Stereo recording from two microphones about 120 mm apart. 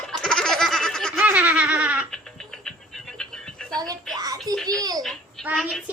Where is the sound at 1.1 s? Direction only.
15° right (ahead or behind).